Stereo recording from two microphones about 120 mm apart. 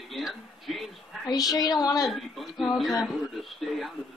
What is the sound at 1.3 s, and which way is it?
Speech, 30° left (ahead or behind).